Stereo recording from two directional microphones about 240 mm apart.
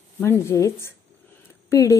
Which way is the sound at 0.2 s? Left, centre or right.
Centre.